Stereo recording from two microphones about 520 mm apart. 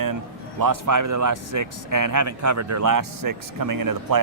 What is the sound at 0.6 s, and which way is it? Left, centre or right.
Speech, right.